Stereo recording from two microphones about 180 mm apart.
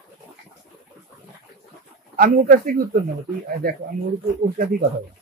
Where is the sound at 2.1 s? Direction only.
50° right (ahead or behind).